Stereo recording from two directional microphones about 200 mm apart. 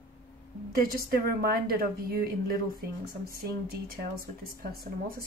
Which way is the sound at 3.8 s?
50° right (ahead or behind).